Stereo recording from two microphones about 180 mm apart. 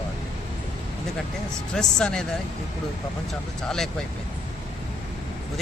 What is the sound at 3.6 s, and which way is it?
Speech, 5° left (ahead or behind).